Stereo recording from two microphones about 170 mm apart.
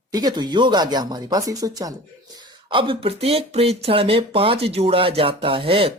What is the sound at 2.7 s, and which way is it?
Speech, 30° right (ahead or behind).